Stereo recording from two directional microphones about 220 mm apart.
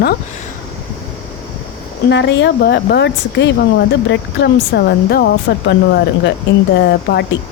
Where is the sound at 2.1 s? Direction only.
55° left (ahead or behind).